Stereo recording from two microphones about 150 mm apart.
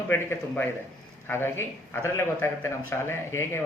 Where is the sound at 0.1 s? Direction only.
15° left (ahead or behind).